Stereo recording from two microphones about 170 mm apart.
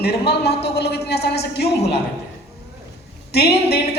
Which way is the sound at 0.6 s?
70° left (ahead or behind).